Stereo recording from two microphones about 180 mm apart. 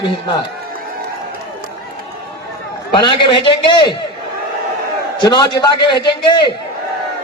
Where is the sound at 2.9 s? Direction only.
25° left (ahead or behind).